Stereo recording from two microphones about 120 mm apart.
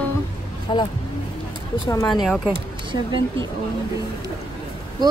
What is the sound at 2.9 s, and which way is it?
Speech, 45° right (ahead or behind).